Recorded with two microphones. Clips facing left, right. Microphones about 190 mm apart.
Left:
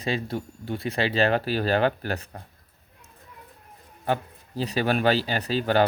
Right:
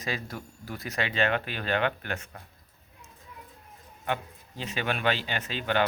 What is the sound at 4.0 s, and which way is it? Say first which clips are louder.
Speech: left 5 dB; 35° left (ahead or behind).